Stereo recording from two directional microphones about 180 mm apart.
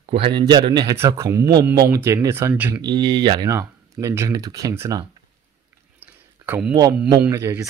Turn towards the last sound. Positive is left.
turn(degrees=-15)  # may be behind; listen again after turning